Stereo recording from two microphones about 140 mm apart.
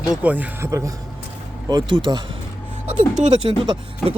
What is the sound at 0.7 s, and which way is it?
A man's voice, 20° right (ahead or behind).